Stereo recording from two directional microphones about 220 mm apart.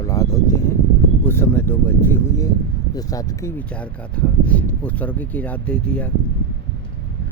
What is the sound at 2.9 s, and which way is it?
Speech, 15° left (ahead or behind).